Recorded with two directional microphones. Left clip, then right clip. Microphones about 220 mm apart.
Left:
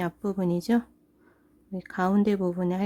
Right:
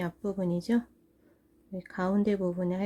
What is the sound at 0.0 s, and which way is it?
A woman's voice, 20° left (ahead or behind).